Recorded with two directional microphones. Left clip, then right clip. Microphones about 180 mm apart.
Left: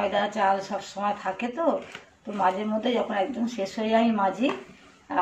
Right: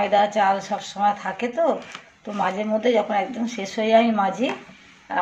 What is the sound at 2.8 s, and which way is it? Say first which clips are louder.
A man's voice: right 6 dB; 35° right (ahead or behind).